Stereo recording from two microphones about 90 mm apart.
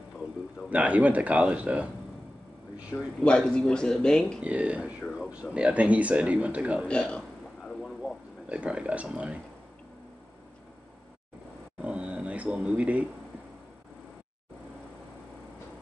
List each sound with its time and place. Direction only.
0.7 s speech: 15° right (ahead or behind)
3.2 s speech: 10° left (ahead or behind)
4.4 s speech: 15° right (ahead or behind)
6.9 s a sound: 10° left (ahead or behind)
8.5 s speech: 10° right (ahead or behind)
11.8 s a sound: 15° right (ahead or behind)